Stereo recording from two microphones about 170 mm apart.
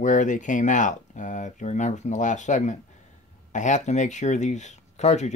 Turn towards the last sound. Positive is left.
turn(degrees=45)  # may be behind; listen again after turning